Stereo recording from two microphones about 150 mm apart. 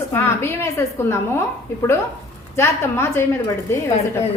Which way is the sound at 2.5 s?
15° left (ahead or behind).